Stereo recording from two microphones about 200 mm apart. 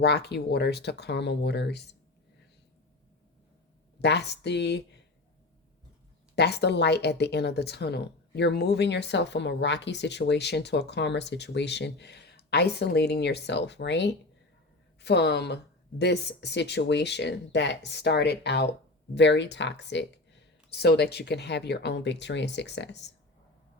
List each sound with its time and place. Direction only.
0.0 s a woman's voice: 55° left (ahead or behind)
4.0 s a woman's voice: 55° left (ahead or behind)
6.3 s a woman's voice: 55° left (ahead or behind)